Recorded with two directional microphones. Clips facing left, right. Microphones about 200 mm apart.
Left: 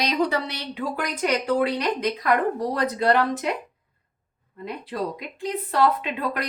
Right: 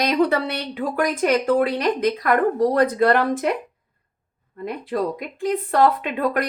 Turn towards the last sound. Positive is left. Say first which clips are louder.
# right 6 dB
turn(degrees=-50)  # may be behind; listen again after turning